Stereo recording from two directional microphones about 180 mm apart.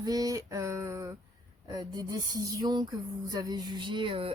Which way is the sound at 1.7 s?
20° right (ahead or behind).